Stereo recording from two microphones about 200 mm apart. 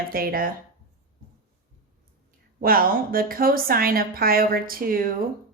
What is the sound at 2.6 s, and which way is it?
A woman's voice, 45° right (ahead or behind).